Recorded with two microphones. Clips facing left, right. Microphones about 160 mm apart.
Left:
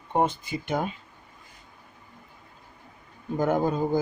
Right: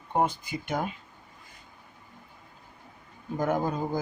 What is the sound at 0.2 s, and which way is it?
Speech, 25° left (ahead or behind).